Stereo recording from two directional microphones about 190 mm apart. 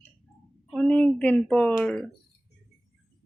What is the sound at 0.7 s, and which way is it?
Speech, 5° left (ahead or behind).